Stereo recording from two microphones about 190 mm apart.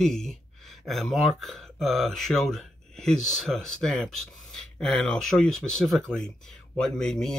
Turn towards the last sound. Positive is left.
turn(degrees=5)  # may be behind; listen again after turning